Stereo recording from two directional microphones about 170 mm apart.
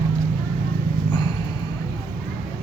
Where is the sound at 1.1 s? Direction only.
25° left (ahead or behind).